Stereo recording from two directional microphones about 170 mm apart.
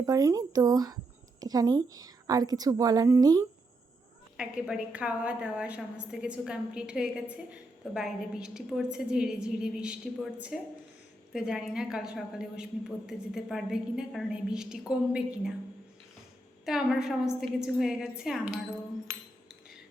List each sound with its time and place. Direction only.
0.0 s a woman's voice: 20° right (ahead or behind)
4.4 s a woman's voice: 5° right (ahead or behind)
16.6 s a woman's voice: centre (ahead or behind)
19.1 s cutlery: 15° right (ahead or behind)